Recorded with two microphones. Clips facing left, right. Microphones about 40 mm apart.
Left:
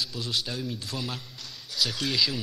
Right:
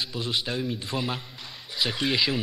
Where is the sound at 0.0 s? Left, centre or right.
Right.